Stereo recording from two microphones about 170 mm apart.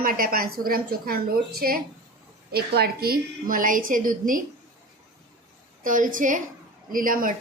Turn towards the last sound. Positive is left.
turn(degrees=-55)  # may be behind; listen again after turning